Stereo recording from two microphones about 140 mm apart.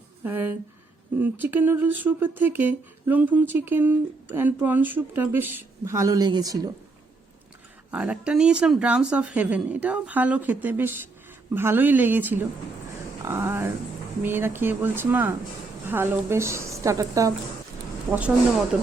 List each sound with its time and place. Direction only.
0.3 s speech: 15° right (ahead or behind)
7.9 s a woman's voice: 10° right (ahead or behind)